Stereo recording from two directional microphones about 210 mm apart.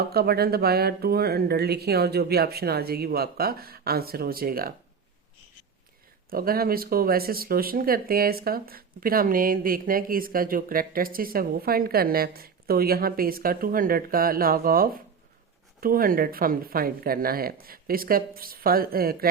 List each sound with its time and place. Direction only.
0.0 s speech: 50° right (ahead or behind)
6.3 s speech: 45° right (ahead or behind)